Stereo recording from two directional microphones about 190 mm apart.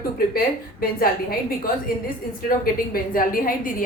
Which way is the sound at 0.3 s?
50° left (ahead or behind).